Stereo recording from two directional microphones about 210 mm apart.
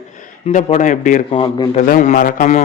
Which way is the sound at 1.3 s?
25° left (ahead or behind).